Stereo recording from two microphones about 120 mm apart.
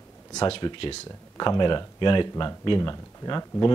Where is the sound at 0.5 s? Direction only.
45° left (ahead or behind).